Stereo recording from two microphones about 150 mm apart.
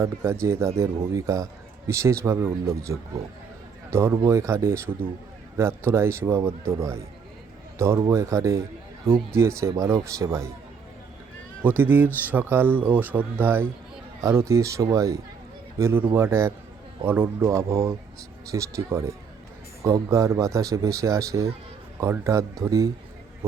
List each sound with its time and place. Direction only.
0.0 s speech: 20° right (ahead or behind)
11.8 s speech: 15° right (ahead or behind)